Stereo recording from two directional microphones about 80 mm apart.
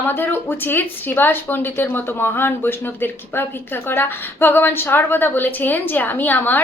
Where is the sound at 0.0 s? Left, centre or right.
Left.